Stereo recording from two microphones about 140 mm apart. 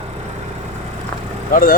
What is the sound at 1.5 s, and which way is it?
Speech, 90° left.